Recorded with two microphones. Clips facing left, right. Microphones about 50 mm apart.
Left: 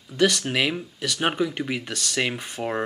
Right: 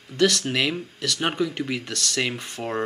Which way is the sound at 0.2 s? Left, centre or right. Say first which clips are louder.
Even; centre.